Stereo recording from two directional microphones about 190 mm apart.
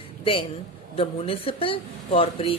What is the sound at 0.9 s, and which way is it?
Speech, 30° left (ahead or behind).